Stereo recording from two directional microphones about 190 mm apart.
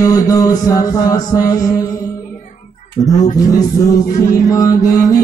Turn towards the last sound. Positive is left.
turn(degrees=20)  # may be behind; listen again after turning